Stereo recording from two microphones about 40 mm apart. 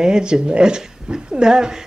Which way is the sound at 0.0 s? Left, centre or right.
Centre.